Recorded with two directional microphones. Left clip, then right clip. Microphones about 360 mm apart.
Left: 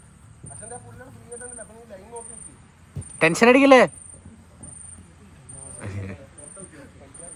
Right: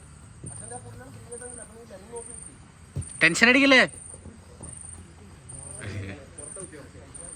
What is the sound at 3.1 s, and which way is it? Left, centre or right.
Speech, centre.